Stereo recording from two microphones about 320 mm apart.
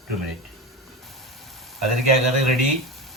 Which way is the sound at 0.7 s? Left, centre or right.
Centre.